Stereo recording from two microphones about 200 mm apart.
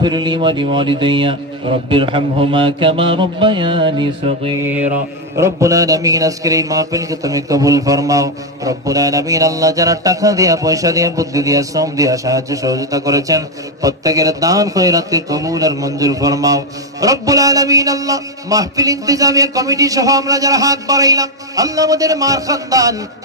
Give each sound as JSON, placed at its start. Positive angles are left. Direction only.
{"t": 0.0, "sound": "mantra", "side_deg": -20}
{"t": 4.6, "sound": "a man's voice", "side_deg": -5}